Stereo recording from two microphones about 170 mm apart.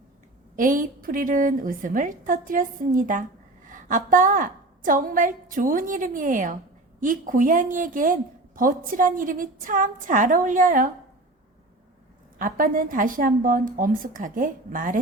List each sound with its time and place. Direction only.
0.5 s a woman's voice: 50° right (ahead or behind)
12.4 s a woman's voice: 55° right (ahead or behind)